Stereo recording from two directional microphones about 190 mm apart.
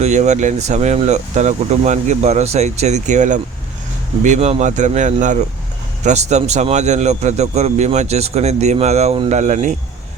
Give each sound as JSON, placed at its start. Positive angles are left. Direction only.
{"t": 0.0, "sound": "speech", "side_deg": -35}